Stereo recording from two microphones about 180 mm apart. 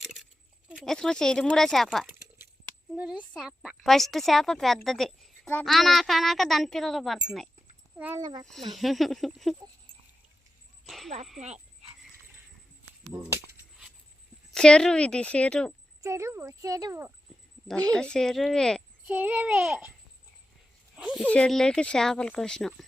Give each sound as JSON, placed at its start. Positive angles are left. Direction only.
{"t": 0.0, "sound": "a sound", "side_deg": 0}
{"t": 0.7, "sound": "a woman's voice", "side_deg": 5}
{"t": 8.2, "sound": "speech", "side_deg": -20}
{"t": 8.7, "sound": "a woman's voice", "side_deg": 0}
{"t": 10.8, "sound": "a woman's voice", "side_deg": 0}
{"t": 14.5, "sound": "a woman's voice", "side_deg": 5}
{"t": 16.0, "sound": "a woman's voice", "side_deg": -15}
{"t": 17.9, "sound": "a woman's voice", "side_deg": 5}
{"t": 19.0, "sound": "a woman's voice", "side_deg": -10}
{"t": 20.9, "sound": "speech", "side_deg": -5}
{"t": 21.2, "sound": "a woman's voice", "side_deg": 5}